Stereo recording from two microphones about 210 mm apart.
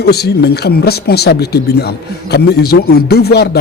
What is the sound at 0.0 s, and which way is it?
Speech, 50° left (ahead or behind).